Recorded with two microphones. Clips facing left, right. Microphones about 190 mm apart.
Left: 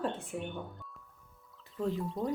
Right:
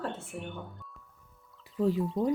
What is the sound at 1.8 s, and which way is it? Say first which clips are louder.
Speech: right 6 dB; 10° right (ahead or behind).